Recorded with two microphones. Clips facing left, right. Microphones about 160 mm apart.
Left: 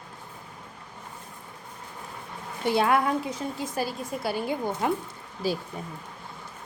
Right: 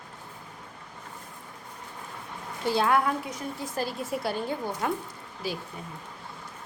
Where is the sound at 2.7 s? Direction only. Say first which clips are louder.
Left 1 dB; 20° left (ahead or behind).